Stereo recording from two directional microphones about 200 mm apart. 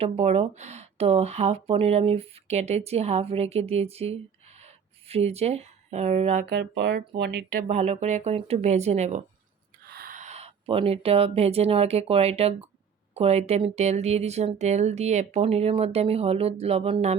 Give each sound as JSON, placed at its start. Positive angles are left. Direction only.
{"t": 0.0, "sound": "speech", "side_deg": -30}
{"t": 6.5, "sound": "speech", "side_deg": -55}
{"t": 7.7, "sound": "speech", "side_deg": -35}
{"t": 9.8, "sound": "speech", "side_deg": -50}